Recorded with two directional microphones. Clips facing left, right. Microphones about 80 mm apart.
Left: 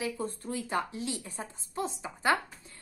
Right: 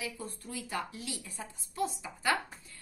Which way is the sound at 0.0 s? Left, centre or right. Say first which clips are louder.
Left 7 dB; left.